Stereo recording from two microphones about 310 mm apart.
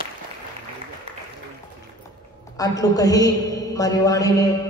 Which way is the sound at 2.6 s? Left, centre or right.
Centre.